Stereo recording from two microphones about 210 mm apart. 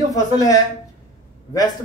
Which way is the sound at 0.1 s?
15° left (ahead or behind).